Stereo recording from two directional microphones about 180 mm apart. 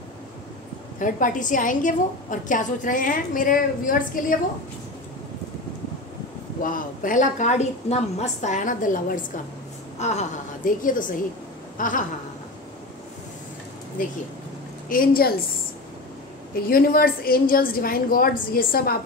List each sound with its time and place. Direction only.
0.9 s a woman's voice: 45° left (ahead or behind)
6.6 s a woman's voice: 50° left (ahead or behind)
14.9 s a woman's voice: 55° left (ahead or behind)
16.5 s a woman's voice: 55° left (ahead or behind)